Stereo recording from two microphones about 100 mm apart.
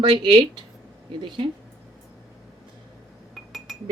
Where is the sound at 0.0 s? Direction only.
55° right (ahead or behind).